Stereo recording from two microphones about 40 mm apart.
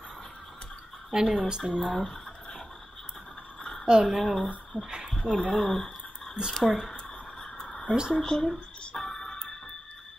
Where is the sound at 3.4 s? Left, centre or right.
Left.